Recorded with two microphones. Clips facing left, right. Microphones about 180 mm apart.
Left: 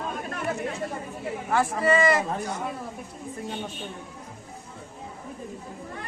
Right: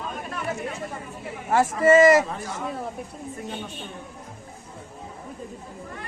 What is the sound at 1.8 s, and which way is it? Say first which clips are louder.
Speech: right 8 dB; 40° right (ahead or behind).